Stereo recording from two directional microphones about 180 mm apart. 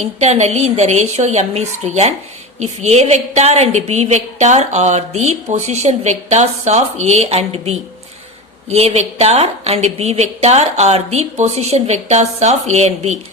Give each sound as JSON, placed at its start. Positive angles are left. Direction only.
{"t": 0.0, "sound": "a woman's voice", "side_deg": -40}